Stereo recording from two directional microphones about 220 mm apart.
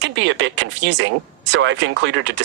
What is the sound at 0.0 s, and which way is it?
Speech, 55° right (ahead or behind).